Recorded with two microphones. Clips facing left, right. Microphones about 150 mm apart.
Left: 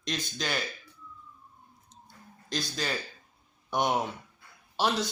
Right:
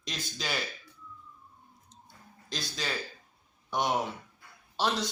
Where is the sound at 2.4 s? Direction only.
Centre (ahead or behind).